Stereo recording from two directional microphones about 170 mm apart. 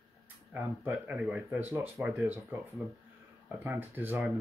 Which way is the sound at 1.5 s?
10° right (ahead or behind).